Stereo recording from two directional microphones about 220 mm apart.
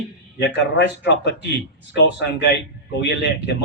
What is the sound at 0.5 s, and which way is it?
A man's voice, 50° left (ahead or behind).